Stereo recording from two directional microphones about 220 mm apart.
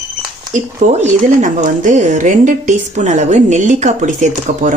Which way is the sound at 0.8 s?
35° right (ahead or behind).